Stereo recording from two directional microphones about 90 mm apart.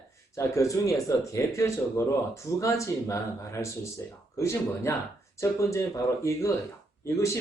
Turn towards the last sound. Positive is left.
turn(degrees=30)  # may be behind; listen again after turning